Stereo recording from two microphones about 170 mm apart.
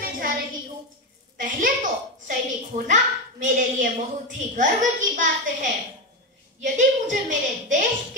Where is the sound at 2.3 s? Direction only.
50° right (ahead or behind).